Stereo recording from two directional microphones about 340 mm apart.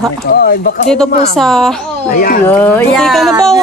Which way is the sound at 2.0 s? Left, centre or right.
Left.